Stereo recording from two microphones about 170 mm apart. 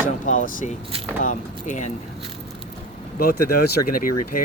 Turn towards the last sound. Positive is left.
turn(degrees=55)  # may be behind; listen again after turning